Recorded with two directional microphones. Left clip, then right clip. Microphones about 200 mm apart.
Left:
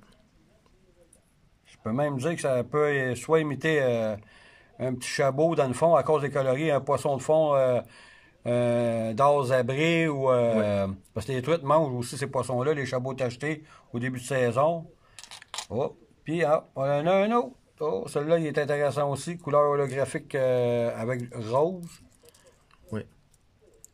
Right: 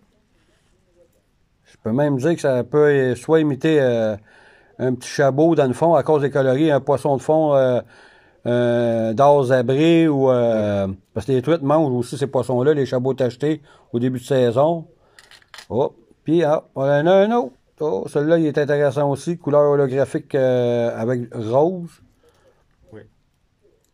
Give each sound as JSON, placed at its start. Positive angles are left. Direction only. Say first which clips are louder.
{"t": 1.7, "sound": "speech", "louder": "right 8 dB", "side_deg": -15}